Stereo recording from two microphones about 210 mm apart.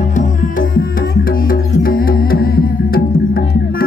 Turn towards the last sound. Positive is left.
turn(degrees=45)  # may be behind; listen again after turning